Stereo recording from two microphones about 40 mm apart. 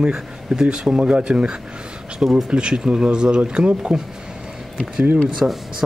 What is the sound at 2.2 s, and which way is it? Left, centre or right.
Speech, centre.